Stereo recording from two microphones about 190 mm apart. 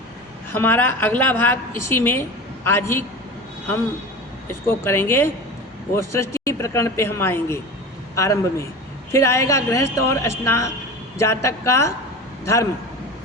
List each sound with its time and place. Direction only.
0.5 s a woman's voice: 10° left (ahead or behind)
4.6 s a woman's voice: 15° left (ahead or behind)